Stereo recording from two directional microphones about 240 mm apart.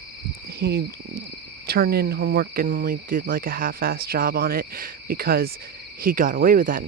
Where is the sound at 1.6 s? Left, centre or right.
Right.